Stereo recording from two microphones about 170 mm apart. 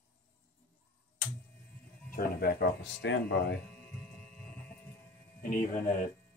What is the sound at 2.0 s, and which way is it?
Speech, 60° left (ahead or behind).